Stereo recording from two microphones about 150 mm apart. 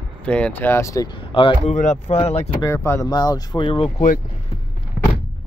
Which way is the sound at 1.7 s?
55° left (ahead or behind).